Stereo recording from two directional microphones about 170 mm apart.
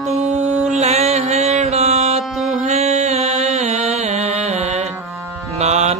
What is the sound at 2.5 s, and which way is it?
Music, 40° right (ahead or behind).